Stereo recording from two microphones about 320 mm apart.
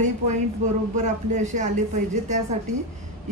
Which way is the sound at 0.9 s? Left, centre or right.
Right.